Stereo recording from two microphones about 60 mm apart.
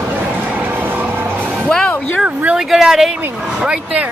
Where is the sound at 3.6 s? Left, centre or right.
Centre.